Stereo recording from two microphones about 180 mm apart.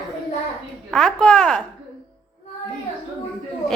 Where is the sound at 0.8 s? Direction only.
5° left (ahead or behind).